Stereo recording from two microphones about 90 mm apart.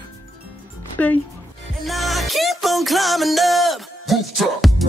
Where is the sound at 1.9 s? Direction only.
Centre (ahead or behind).